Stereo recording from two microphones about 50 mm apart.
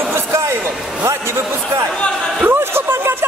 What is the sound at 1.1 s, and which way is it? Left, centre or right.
Speech, right.